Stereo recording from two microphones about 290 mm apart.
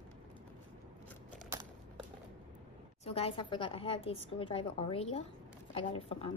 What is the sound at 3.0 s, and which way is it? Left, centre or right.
A woman's voice, centre.